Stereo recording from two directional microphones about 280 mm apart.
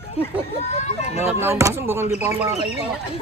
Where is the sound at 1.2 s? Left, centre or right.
Centre.